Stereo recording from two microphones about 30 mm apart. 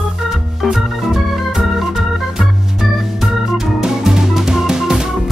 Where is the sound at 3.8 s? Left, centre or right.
Centre.